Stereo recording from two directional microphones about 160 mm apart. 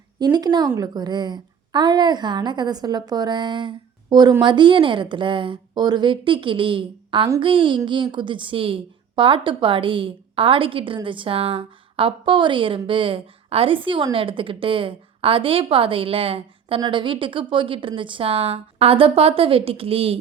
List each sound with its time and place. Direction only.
0.2 s a woman's voice: 25° right (ahead or behind)